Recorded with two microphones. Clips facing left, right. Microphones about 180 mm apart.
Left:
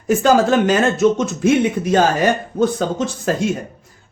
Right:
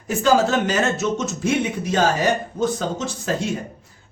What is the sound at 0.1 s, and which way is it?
Speech, 50° left (ahead or behind).